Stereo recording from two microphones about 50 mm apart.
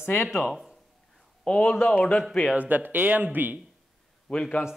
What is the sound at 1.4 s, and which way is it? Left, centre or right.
Speech, left.